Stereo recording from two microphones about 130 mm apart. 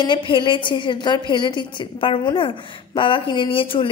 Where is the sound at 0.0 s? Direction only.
40° left (ahead or behind).